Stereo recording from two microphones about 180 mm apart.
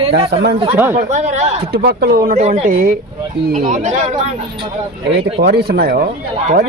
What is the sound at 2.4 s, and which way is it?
A man's voice, 35° right (ahead or behind).